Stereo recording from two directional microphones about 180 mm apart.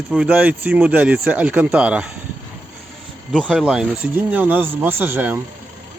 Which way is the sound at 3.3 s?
5° right (ahead or behind).